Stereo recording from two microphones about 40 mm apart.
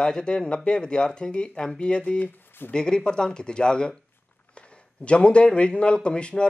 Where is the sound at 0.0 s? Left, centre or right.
Centre.